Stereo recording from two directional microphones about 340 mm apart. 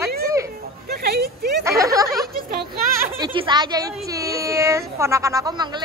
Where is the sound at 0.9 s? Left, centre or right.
Right.